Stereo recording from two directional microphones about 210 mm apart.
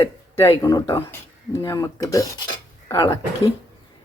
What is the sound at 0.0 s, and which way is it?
Speech, 15° left (ahead or behind).